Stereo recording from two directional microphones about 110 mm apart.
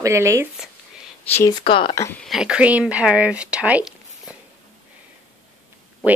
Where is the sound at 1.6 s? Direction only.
50° left (ahead or behind).